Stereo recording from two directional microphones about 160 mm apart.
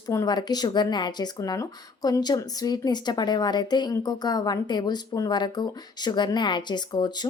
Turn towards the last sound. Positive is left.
turn(degrees=25)  # may be behind; listen again after turning